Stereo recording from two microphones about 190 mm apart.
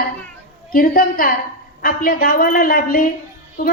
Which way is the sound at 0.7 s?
50° left (ahead or behind).